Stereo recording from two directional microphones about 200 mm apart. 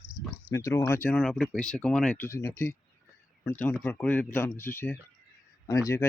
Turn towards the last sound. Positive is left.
turn(degrees=15)  # may be behind; listen again after turning